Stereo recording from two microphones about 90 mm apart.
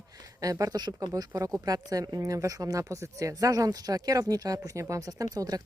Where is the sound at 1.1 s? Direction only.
40° right (ahead or behind).